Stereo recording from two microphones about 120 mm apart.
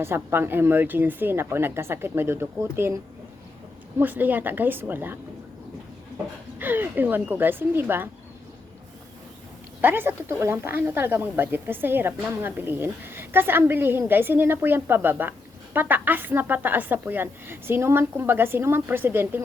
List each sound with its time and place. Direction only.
0.0 s a woman's voice: 20° right (ahead or behind)
6.6 s a woman's voice: 15° right (ahead or behind)
9.8 s a woman's voice: 15° right (ahead or behind)